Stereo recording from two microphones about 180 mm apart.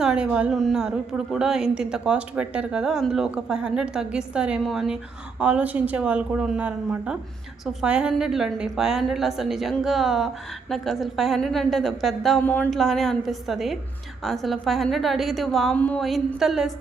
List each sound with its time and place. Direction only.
0.0 s a woman's voice: 5° right (ahead or behind)